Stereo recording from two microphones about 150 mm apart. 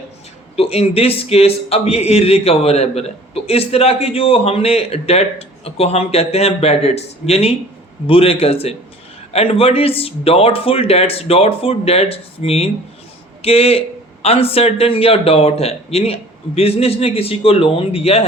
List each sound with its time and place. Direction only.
0.5 s a man's voice: 40° left (ahead or behind)